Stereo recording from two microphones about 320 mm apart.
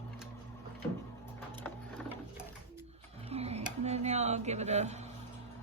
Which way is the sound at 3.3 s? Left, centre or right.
Centre.